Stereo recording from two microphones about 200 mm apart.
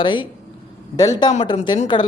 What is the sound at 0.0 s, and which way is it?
Speech, 25° left (ahead or behind).